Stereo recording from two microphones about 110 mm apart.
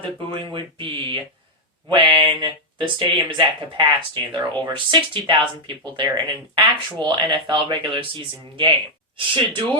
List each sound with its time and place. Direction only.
0.0 s speech: 50° right (ahead or behind)